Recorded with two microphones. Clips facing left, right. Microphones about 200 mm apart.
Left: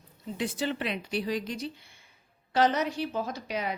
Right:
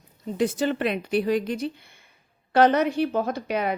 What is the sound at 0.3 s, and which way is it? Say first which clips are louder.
A woman's voice: right 7 dB; 45° right (ahead or behind).